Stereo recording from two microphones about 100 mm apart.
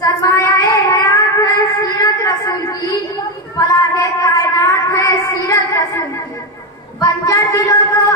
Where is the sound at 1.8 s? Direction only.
35° left (ahead or behind).